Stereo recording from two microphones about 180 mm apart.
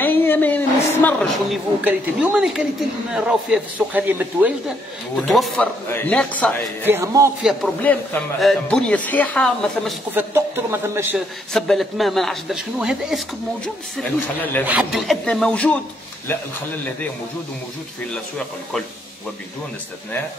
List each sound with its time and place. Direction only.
0.0 s a sound: 10° left (ahead or behind)
1.5 s a man's voice: 5° right (ahead or behind)
6.9 s speech: 15° right (ahead or behind)
7.4 s a man's voice: 5° left (ahead or behind)
10.1 s speech: 15° right (ahead or behind)
11.1 s a man's voice: centre (ahead or behind)
14.4 s a man's voice: 10° left (ahead or behind)
14.7 s a man's voice: 5° right (ahead or behind)